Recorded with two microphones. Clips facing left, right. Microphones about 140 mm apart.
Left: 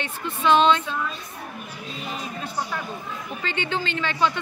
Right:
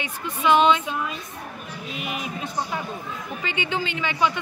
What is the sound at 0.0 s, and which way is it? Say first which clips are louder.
Speech: even; 10° right (ahead or behind).